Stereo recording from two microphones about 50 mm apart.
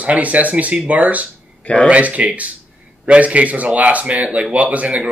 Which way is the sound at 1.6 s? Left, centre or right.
Left.